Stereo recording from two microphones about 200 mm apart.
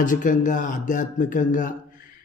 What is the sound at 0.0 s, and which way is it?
Mantra, 40° left (ahead or behind).